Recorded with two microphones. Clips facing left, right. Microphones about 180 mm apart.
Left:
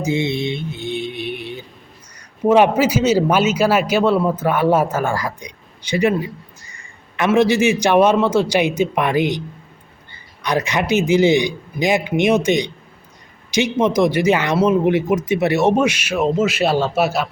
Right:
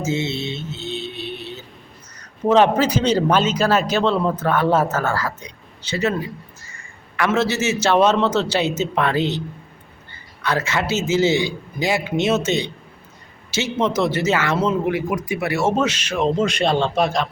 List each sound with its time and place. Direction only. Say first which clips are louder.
0.0 s mantra: left 3 dB; 15° left (ahead or behind)
2.4 s a man's voice: left 2 dB; 10° left (ahead or behind)
7.3 s a man's voice: left 6 dB; 15° left (ahead or behind)
10.4 s a man's voice: left 2 dB; 15° left (ahead or behind)